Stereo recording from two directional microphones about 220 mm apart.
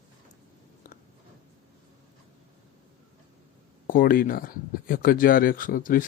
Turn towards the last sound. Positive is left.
turn(degrees=40)  # may be behind; listen again after turning